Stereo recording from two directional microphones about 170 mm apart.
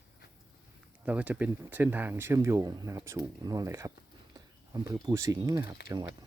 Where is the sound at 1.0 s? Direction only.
10° right (ahead or behind).